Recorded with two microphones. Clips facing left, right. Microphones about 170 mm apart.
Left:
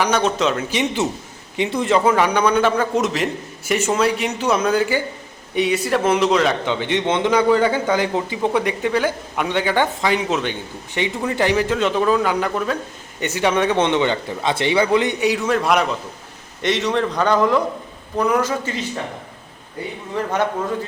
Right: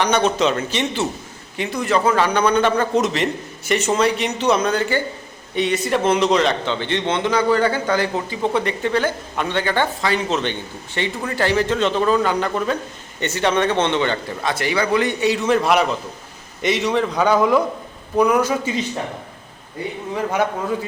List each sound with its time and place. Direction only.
0.0 s speech: centre (ahead or behind)
0.7 s a man's voice: 10° left (ahead or behind)
1.5 s a man's voice: 25° left (ahead or behind)
15.4 s a man's voice: centre (ahead or behind)